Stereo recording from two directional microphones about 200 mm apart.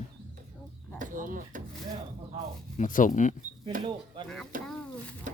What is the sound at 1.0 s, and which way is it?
Speech, 40° right (ahead or behind).